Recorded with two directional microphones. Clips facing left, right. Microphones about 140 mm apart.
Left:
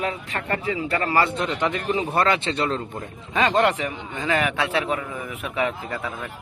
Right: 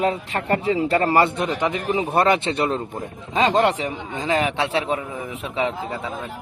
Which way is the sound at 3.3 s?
30° right (ahead or behind).